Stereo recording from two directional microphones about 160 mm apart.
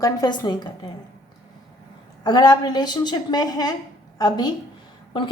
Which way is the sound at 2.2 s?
25° left (ahead or behind).